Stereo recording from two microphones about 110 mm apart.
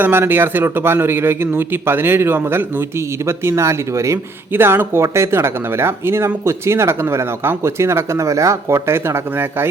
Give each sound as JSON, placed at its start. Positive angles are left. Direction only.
{"t": 0.0, "sound": "speech", "side_deg": -20}